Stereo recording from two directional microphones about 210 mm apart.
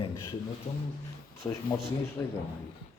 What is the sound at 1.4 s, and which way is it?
Speech, 25° left (ahead or behind).